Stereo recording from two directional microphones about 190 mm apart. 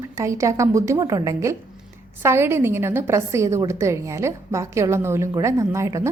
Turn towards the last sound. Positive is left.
turn(degrees=-15)  # may be behind; listen again after turning